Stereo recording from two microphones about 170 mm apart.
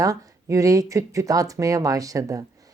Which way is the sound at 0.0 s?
20° right (ahead or behind).